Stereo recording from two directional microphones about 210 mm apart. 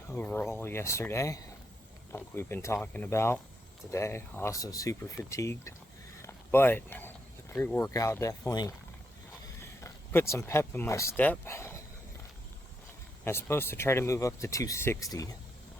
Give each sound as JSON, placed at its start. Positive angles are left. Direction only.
{"t": 0.1, "sound": "speech", "side_deg": 10}
{"t": 6.2, "sound": "a sound", "side_deg": 10}
{"t": 7.5, "sound": "speech", "side_deg": 10}
{"t": 13.2, "sound": "speech", "side_deg": 10}